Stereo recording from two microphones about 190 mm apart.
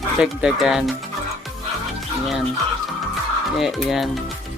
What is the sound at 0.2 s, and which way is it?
Speech, 5° right (ahead or behind).